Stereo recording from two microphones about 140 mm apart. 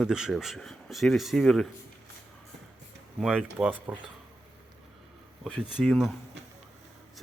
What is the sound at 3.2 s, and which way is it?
Speech, 5° right (ahead or behind).